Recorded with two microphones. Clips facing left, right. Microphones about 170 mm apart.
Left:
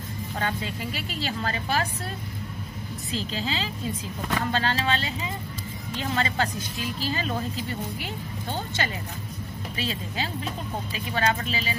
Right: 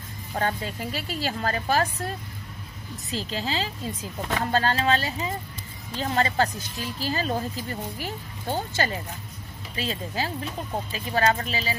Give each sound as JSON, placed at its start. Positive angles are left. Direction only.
{"t": 0.4, "sound": "speech", "side_deg": -40}
{"t": 3.1, "sound": "speech", "side_deg": -40}